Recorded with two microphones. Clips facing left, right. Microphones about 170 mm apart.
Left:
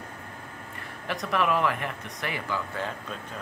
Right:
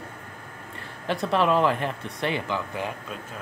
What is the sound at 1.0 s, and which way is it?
Speech, 30° right (ahead or behind).